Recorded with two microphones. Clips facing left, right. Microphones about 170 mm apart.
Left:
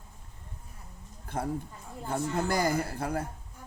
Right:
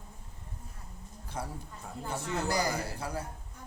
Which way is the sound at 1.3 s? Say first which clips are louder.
Left 7 dB; 50° left (ahead or behind).